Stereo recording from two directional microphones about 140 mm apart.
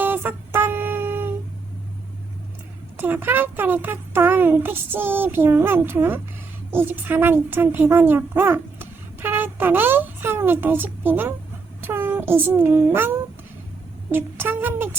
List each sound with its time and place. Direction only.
0.0 s music: 15° right (ahead or behind)
3.0 s a child's voice: 15° right (ahead or behind)
11.8 s child singing: 15° right (ahead or behind)
14.1 s speech: 15° right (ahead or behind)